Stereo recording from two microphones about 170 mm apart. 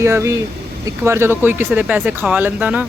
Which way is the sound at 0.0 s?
15° right (ahead or behind).